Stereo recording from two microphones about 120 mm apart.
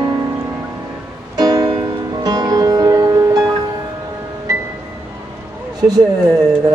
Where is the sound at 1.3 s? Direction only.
35° right (ahead or behind).